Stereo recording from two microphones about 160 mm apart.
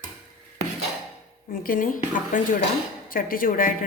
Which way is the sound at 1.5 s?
60° left (ahead or behind).